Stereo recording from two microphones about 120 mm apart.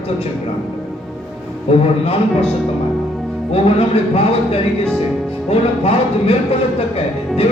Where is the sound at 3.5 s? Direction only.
55° left (ahead or behind).